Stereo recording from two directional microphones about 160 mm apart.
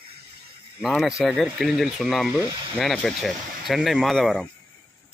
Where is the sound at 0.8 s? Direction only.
Centre (ahead or behind).